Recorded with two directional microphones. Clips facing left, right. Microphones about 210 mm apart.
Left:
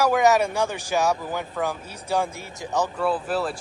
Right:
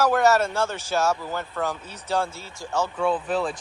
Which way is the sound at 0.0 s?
15° left (ahead or behind).